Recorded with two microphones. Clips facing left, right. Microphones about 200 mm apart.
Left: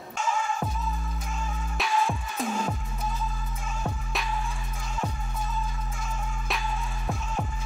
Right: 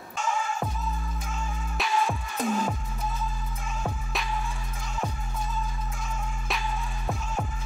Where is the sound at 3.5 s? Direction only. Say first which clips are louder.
Even; centre (ahead or behind).